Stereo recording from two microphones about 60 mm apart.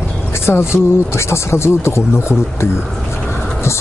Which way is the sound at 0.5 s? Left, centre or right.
Left.